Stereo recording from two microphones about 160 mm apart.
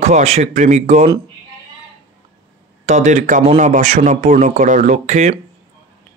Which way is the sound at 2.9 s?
45° right (ahead or behind).